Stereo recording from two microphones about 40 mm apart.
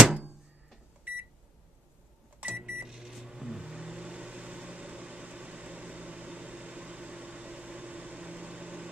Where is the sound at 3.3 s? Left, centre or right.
Centre.